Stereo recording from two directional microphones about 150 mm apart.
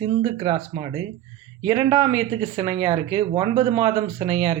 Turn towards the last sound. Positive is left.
turn(degrees=-30)  # may be behind; listen again after turning